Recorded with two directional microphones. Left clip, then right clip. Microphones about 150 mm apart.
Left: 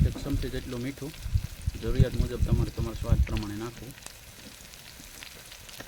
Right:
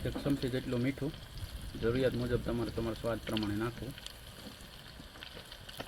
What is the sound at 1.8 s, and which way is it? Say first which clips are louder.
Speech: right 1 dB; 20° right (ahead or behind).